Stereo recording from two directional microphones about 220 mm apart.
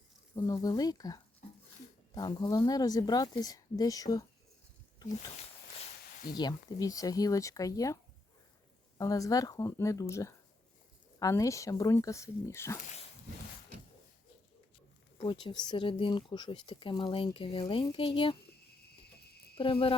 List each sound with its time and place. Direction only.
0.3 s speech: 15° left (ahead or behind)
1.4 s a sound: 35° left (ahead or behind)
2.1 s speech: 15° left (ahead or behind)
6.3 s speech: 20° left (ahead or behind)
9.0 s speech: 15° left (ahead or behind)
15.2 s speech: 20° left (ahead or behind)
18.9 s cricket: 45° left (ahead or behind)
19.5 s speech: 25° left (ahead or behind)